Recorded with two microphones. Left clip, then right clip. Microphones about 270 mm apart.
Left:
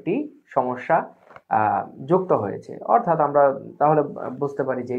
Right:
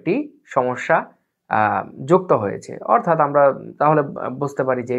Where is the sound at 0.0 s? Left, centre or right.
Right.